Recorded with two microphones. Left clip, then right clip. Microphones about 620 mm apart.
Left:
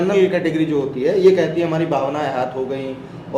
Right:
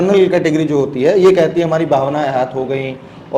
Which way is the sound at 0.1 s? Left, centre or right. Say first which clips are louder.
Right 5 dB; right.